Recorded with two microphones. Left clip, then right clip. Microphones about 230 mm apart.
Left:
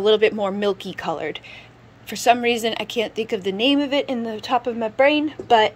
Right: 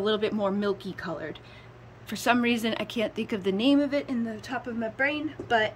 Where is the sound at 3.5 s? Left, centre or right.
Right.